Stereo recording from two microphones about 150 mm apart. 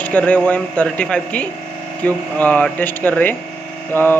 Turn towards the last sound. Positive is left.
turn(degrees=15)  # may be behind; listen again after turning